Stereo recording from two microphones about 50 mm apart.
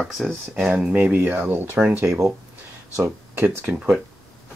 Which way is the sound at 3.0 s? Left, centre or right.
Right.